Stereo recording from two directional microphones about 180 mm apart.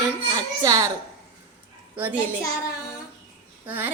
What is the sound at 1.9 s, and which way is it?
Speech, 10° right (ahead or behind).